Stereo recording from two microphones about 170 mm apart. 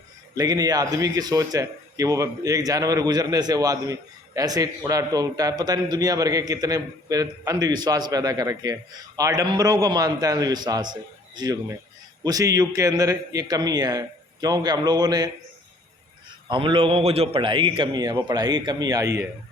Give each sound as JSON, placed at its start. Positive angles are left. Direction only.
{"t": 0.3, "sound": "a man's voice", "side_deg": -20}
{"t": 12.2, "sound": "a man's voice", "side_deg": -20}
{"t": 16.5, "sound": "a man's voice", "side_deg": -30}